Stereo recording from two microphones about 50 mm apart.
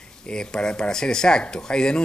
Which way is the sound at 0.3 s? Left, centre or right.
Centre.